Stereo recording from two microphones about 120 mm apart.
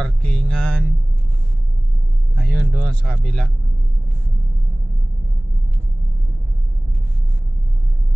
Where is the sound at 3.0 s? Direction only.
5° left (ahead or behind).